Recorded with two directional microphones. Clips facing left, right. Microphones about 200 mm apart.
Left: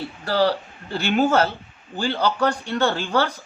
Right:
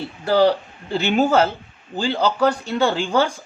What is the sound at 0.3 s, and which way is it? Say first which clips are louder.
Speech: right 4 dB; 15° right (ahead or behind).